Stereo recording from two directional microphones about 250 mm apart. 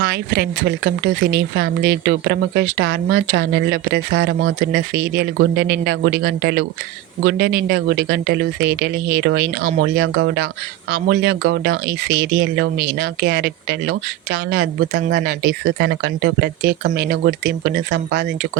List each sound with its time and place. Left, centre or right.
0.0 s speech: right